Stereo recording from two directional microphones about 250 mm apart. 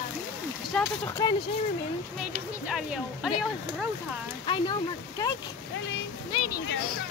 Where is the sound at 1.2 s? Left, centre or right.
Centre.